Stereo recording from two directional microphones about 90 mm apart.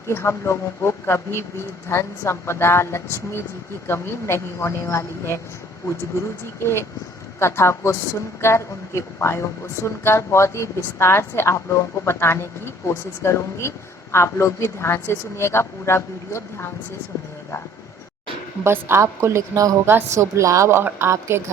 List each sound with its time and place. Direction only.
0.1 s a woman's voice: 30° left (ahead or behind)
7.3 s a woman's voice: 30° left (ahead or behind)
18.6 s a woman's voice: 30° right (ahead or behind)